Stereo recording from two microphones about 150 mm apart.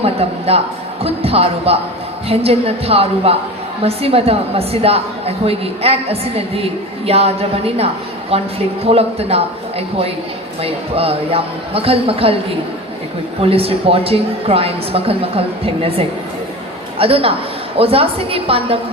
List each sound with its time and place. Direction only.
0.0 s a woman's voice: 40° right (ahead or behind)
13.4 s a woman's voice: 40° right (ahead or behind)